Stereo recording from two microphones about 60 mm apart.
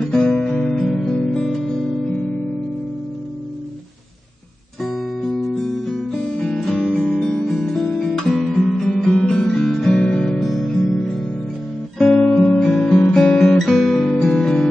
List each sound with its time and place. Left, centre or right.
0.1 s music: centre
5.2 s music: centre
6.8 s guitar: centre
8.9 s music: centre
10.4 s music: centre
12.4 s guitar: centre